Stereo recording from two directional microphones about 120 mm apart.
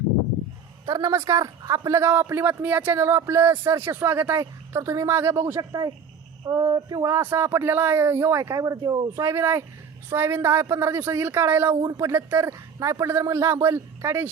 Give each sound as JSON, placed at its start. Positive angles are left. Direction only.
{"t": 0.9, "sound": "a man's voice", "side_deg": -35}
{"t": 6.4, "sound": "speech", "side_deg": -35}
{"t": 7.2, "sound": "a man's voice", "side_deg": -20}